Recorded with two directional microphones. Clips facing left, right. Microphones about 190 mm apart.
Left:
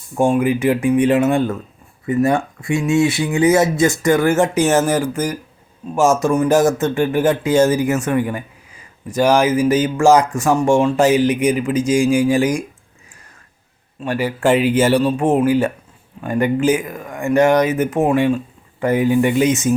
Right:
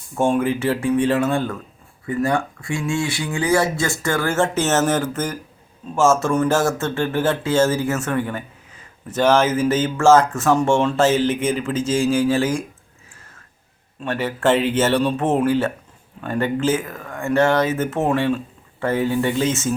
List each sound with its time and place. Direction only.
0.2 s speech: 15° left (ahead or behind)
14.0 s speech: 10° left (ahead or behind)